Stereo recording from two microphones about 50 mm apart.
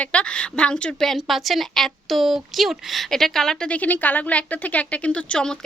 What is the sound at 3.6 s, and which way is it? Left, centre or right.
Speech, left.